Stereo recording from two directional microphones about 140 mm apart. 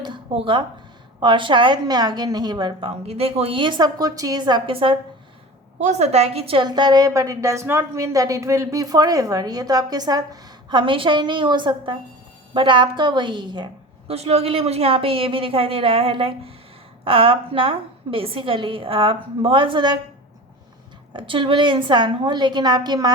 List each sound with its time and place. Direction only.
0.0 s a sound: 35° right (ahead or behind)
1.2 s a woman's voice: 35° right (ahead or behind)
3.1 s a woman's voice: 45° right (ahead or behind)
5.8 s a woman's voice: 55° right (ahead or behind); by 13.7 s 35° right (ahead or behind)
14.1 s a woman's voice: 45° right (ahead or behind)
21.1 s a woman's voice: 35° right (ahead or behind)